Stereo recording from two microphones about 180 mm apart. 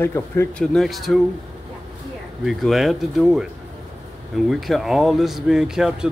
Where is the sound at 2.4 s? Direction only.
Centre (ahead or behind).